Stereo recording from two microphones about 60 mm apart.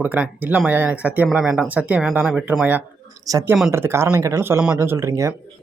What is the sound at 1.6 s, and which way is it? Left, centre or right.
Speech, right.